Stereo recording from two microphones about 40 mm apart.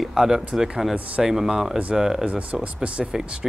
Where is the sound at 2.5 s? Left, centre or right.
Right.